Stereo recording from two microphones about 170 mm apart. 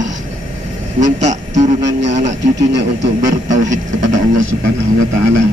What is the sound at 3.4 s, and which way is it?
Speech, 45° right (ahead or behind).